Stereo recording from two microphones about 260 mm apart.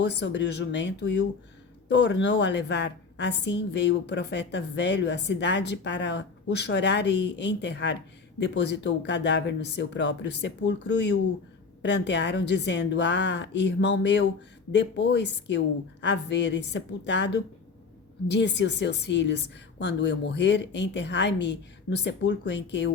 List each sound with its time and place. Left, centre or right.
0.0 s a woman's voice: left